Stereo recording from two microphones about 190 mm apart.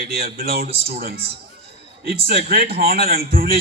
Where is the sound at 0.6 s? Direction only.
30° right (ahead or behind).